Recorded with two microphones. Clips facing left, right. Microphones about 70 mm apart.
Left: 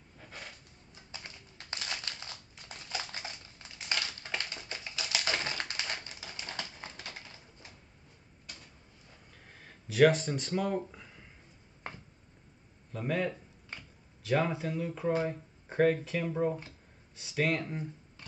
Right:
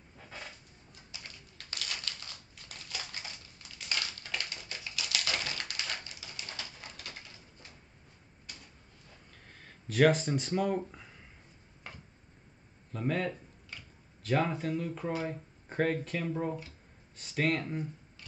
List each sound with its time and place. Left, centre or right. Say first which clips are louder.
1.1 s a sound: left 2 dB; left
9.5 s speech: right 2 dB; centre
12.9 s speech: even; centre